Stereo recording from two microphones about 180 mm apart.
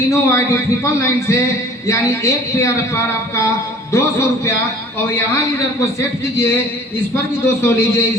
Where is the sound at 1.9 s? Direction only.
15° left (ahead or behind).